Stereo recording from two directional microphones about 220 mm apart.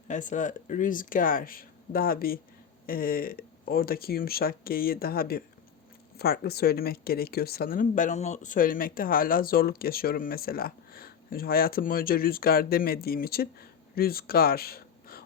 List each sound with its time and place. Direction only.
0.1 s speech: 35° left (ahead or behind)